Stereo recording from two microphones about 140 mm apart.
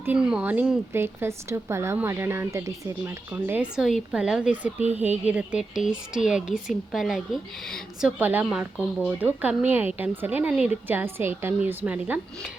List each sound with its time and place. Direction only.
0.0 s a woman's voice: 10° right (ahead or behind)
8.2 s speech: 15° right (ahead or behind)